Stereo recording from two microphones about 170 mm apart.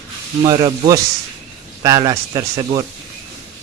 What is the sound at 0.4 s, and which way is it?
A man's voice, 25° right (ahead or behind).